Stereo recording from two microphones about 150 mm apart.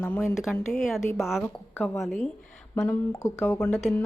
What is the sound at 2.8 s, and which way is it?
Speech, 20° left (ahead or behind).